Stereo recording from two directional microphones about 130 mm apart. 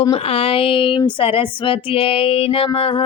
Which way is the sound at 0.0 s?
45° left (ahead or behind).